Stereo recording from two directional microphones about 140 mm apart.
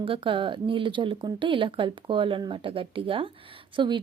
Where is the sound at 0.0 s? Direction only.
40° right (ahead or behind).